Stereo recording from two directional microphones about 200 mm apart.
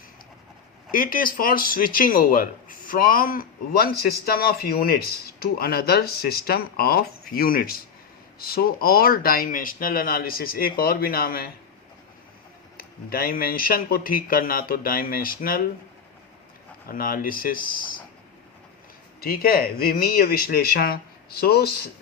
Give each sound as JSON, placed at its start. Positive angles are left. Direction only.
{"t": 0.9, "sound": "speech", "side_deg": 45}
{"t": 12.7, "sound": "speech", "side_deg": 45}
{"t": 16.9, "sound": "speech", "side_deg": 45}
{"t": 19.2, "sound": "speech", "side_deg": 50}